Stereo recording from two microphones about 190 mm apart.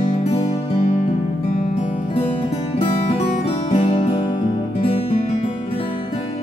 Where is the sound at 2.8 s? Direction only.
30° left (ahead or behind).